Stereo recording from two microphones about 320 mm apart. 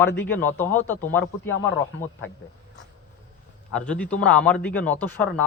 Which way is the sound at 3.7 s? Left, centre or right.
Centre.